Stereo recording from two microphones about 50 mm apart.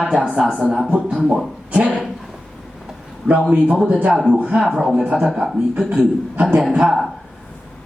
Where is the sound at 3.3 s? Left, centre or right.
Right.